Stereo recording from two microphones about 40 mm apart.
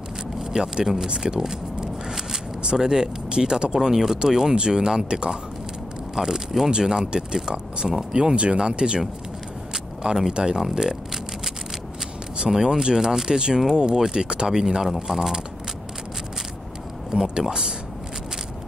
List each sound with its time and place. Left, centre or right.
0.4 s vehicle: centre
0.9 s shuffling cards: centre
2.6 s speech: centre
10.3 s speech: centre
12.4 s speech: centre
14.6 s speech: centre
17.1 s speech: right